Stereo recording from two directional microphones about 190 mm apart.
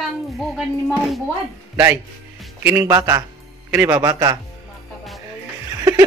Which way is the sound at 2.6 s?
15° right (ahead or behind).